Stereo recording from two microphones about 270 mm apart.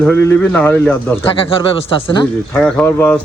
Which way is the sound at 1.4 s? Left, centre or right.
Centre.